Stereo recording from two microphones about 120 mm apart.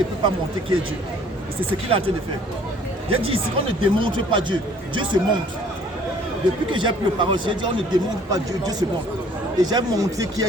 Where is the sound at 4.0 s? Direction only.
45° right (ahead or behind).